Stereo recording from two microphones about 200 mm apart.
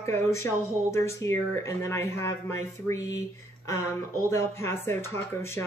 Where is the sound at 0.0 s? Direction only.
15° left (ahead or behind).